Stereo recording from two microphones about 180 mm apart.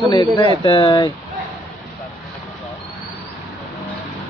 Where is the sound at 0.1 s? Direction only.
25° left (ahead or behind).